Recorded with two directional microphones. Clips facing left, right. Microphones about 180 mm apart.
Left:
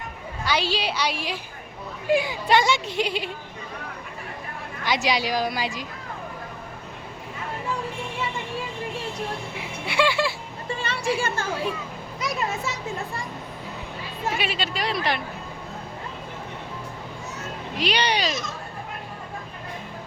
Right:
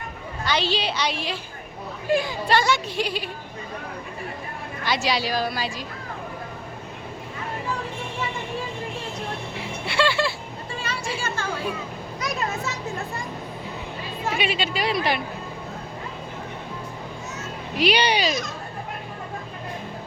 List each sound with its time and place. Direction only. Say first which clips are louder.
0.4 s a woman's voice: right 1 dB; 10° left (ahead or behind)
4.8 s a woman's voice: even; 15° left (ahead or behind)
9.8 s a sound: even; 15° left (ahead or behind)
10.8 s music: left 5 dB; 60° left (ahead or behind)
14.3 s speech: right 5 dB; centre (ahead or behind)
17.7 s speech: right 4 dB; 5° right (ahead or behind)